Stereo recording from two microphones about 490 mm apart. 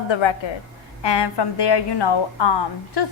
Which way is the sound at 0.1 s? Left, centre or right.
Left.